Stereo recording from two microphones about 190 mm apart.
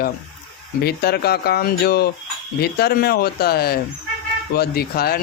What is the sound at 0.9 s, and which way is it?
Speech, 55° left (ahead or behind).